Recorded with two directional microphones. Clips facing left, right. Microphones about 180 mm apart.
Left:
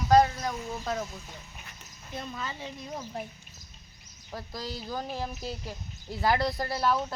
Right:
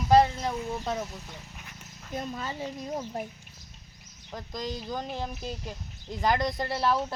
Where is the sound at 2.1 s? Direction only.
40° right (ahead or behind).